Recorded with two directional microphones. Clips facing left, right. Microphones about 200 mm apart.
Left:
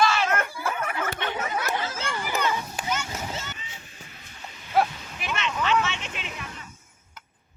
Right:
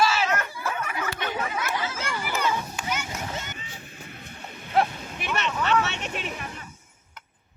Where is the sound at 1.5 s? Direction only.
40° left (ahead or behind).